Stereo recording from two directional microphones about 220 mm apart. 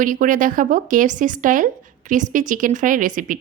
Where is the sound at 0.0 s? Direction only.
35° right (ahead or behind).